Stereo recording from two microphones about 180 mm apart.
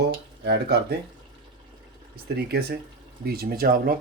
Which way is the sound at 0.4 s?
65° right (ahead or behind).